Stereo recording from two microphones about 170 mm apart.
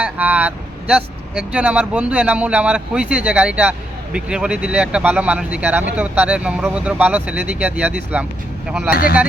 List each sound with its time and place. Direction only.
0.0 s speech: 10° right (ahead or behind)
8.9 s speech: 60° left (ahead or behind)